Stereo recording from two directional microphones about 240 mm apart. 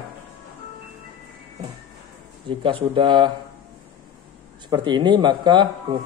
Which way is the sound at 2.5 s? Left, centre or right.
Right.